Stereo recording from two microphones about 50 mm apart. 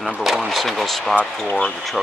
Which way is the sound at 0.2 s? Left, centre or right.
Centre.